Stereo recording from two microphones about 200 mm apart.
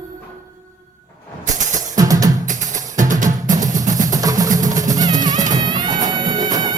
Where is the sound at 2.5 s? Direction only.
40° right (ahead or behind).